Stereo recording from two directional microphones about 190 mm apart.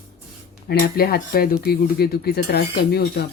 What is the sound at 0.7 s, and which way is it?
Speech, 55° left (ahead or behind).